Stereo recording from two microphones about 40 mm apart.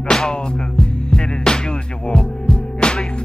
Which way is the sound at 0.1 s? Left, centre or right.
Centre.